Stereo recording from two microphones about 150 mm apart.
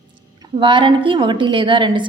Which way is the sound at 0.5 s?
30° right (ahead or behind).